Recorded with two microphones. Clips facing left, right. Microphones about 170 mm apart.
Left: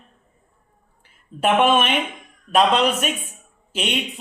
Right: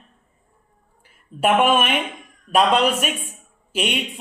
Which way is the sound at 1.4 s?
5° right (ahead or behind).